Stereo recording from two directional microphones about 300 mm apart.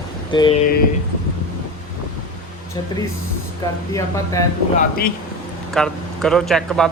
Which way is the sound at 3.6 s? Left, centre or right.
Centre.